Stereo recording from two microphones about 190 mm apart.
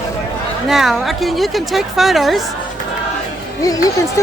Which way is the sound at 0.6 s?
Centre (ahead or behind).